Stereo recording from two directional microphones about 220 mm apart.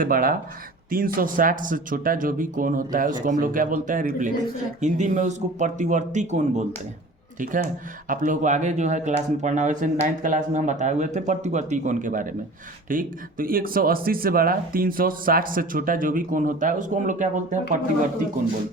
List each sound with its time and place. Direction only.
0.0 s speech: 40° right (ahead or behind)